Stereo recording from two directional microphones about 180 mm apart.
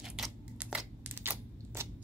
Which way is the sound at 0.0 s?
5° right (ahead or behind).